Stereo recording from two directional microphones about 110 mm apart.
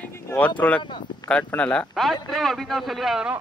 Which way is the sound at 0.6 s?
15° left (ahead or behind).